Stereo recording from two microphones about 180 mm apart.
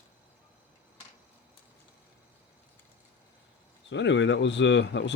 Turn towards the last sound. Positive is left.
turn(degrees=80)